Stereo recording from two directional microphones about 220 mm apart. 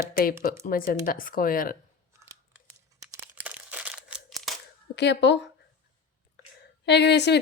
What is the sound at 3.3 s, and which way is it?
Crumpling, 5° right (ahead or behind).